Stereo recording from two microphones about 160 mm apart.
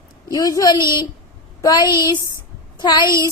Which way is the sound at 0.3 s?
20° left (ahead or behind).